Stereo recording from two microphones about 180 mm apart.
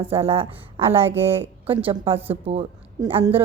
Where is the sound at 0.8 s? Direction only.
15° right (ahead or behind).